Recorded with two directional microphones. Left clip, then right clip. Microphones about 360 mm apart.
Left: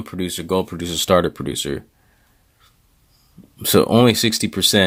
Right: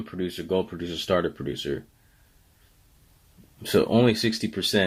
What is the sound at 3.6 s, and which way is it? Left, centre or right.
Speech, left.